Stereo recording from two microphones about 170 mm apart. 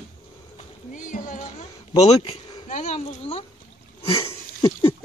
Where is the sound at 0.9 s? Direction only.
50° left (ahead or behind).